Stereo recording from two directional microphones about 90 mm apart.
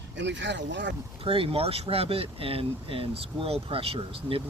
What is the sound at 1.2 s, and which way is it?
Speech, 90° right.